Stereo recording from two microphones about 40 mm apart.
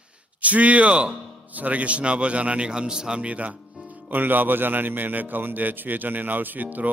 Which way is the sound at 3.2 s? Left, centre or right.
Right.